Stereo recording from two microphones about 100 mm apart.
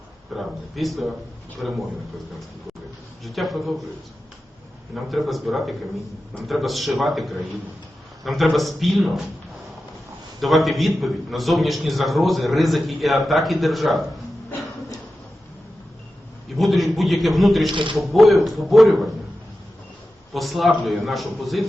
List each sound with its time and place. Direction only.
0.3 s a man's voice: centre (ahead or behind)
3.2 s a man's voice: centre (ahead or behind)
5.0 s a man's voice: centre (ahead or behind)
10.4 s a man's voice: centre (ahead or behind)
16.6 s a man's voice: centre (ahead or behind)
17.7 s speech: 55° right (ahead or behind)
17.9 s a man's voice: centre (ahead or behind)
20.3 s a man's voice: centre (ahead or behind)